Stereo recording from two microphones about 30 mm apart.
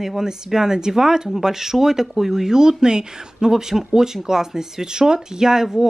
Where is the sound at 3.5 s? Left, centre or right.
Centre.